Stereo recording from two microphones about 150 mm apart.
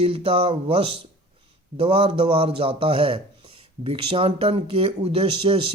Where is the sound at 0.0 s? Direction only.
40° right (ahead or behind).